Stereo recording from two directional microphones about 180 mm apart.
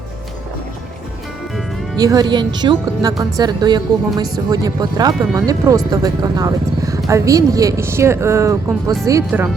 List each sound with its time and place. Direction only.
2.0 s speech: 20° right (ahead or behind)